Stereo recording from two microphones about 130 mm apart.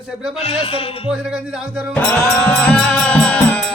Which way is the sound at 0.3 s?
50° left (ahead or behind).